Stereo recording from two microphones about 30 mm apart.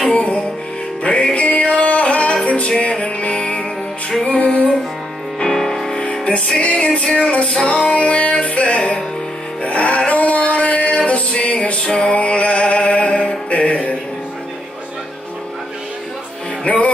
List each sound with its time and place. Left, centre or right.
0.1 s music: left
4.3 s music: left
5.4 s music: centre
6.2 s music: left
16.6 s music: left